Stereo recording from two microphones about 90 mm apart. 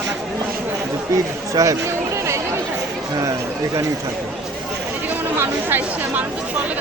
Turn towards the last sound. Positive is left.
turn(degrees=-20)  # may be behind; listen again after turning